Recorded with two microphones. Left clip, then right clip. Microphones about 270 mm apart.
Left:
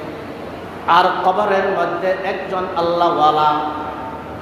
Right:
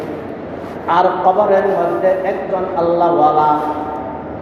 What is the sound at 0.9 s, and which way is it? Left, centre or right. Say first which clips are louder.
Speech: right 1 dB; left.